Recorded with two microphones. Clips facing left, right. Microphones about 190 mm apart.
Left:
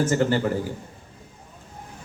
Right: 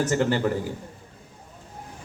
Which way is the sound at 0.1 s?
45° left (ahead or behind).